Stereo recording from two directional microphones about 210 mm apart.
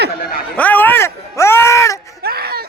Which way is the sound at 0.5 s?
10° left (ahead or behind).